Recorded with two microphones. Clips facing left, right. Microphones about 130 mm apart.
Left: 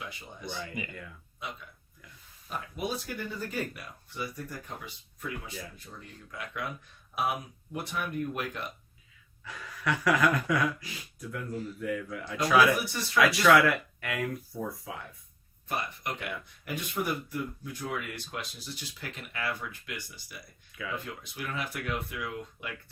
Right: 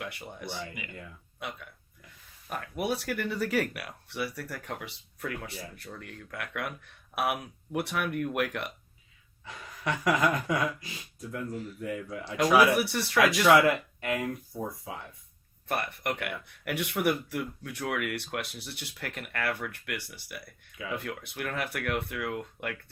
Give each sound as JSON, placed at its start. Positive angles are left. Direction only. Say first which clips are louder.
{"t": 0.0, "sound": "speech", "louder": "right 3 dB", "side_deg": -70}
{"t": 9.4, "sound": "speech", "louder": "even", "side_deg": -25}
{"t": 12.7, "sound": "speech", "louder": "right 4 dB", "side_deg": -70}
{"t": 13.4, "sound": "speech", "louder": "right 1 dB", "side_deg": -20}
{"t": 15.7, "sound": "speech", "louder": "right 3 dB", "side_deg": -65}